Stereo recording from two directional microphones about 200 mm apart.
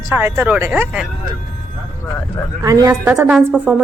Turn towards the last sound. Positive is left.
turn(degrees=-5)  # may be behind; listen again after turning